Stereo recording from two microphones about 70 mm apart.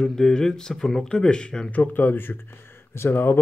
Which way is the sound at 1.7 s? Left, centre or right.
Left.